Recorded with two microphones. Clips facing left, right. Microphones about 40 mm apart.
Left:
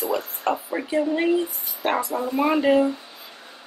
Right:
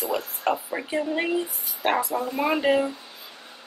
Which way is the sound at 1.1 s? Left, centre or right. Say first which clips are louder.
Left 4 dB; centre.